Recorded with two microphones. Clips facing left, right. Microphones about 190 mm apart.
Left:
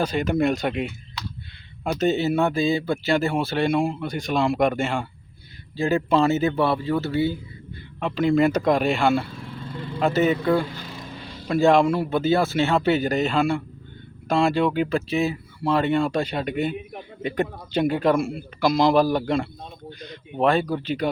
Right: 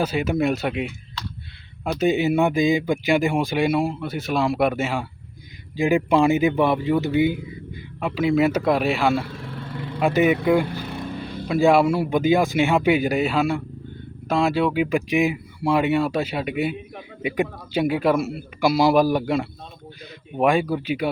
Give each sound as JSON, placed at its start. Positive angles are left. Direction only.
{"t": 0.0, "sound": "speech", "side_deg": -5}
{"t": 2.0, "sound": "speech", "side_deg": -10}
{"t": 7.9, "sound": "speech", "side_deg": -5}
{"t": 10.0, "sound": "speech", "side_deg": -15}
{"t": 10.7, "sound": "a sound", "side_deg": -60}
{"t": 11.4, "sound": "speech", "side_deg": -5}